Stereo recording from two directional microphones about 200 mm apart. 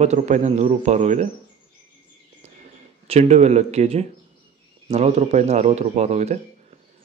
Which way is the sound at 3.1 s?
35° right (ahead or behind).